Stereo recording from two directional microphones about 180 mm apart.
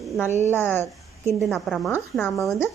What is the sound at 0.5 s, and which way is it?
Speech, 10° left (ahead or behind).